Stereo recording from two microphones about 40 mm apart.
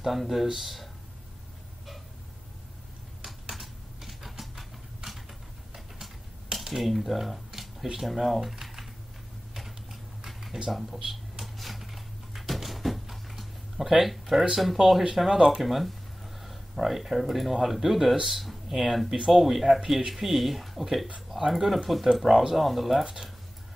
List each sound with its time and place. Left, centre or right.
0.0 s speech: centre
3.5 s typing: centre
5.9 s a sound: centre
9.5 s typing: centre
10.2 s a sound: centre
10.7 s speech: centre
11.1 s a sound: centre
14.5 s speech: centre
19.0 s speech: centre
19.3 s speech: centre
22.1 s speech: centre